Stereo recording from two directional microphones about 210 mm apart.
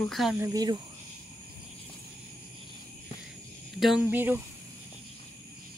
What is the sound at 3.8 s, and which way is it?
Speech, 5° right (ahead or behind).